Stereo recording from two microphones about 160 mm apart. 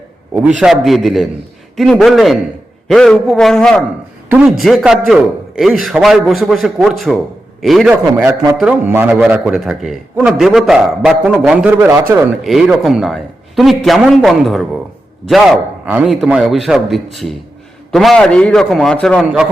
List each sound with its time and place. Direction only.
0.4 s a man's voice: 5° right (ahead or behind)
4.3 s a man's voice: 10° right (ahead or behind)
8.2 s a man's voice: 20° right (ahead or behind)
12.4 s a man's voice: centre (ahead or behind)
15.9 s a man's voice: 5° right (ahead or behind)